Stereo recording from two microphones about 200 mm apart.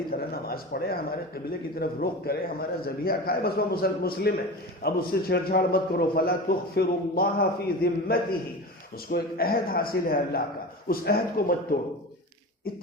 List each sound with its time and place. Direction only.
0.1 s a man's voice: 50° left (ahead or behind)